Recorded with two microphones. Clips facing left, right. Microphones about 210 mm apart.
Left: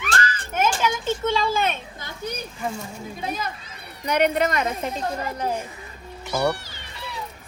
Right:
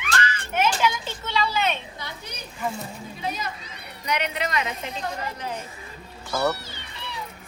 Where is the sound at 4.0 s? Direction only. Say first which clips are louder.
Left 7 dB; 50° left (ahead or behind).